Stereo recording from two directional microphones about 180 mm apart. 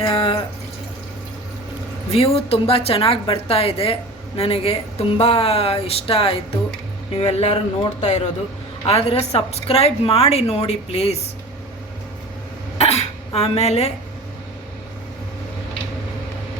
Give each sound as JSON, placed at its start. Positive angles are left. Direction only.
{"t": 0.0, "sound": "a sound", "side_deg": 30}
{"t": 2.1, "sound": "a woman's voice", "side_deg": 30}
{"t": 12.8, "sound": "cough", "side_deg": 35}